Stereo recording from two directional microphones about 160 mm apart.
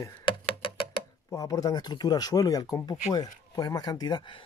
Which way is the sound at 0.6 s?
35° left (ahead or behind).